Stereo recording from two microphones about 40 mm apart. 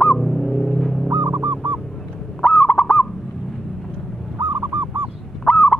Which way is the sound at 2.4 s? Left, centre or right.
Left.